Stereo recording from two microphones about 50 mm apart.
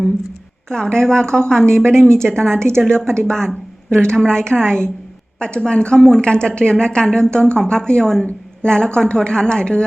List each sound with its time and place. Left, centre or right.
0.7 s a woman's voice: centre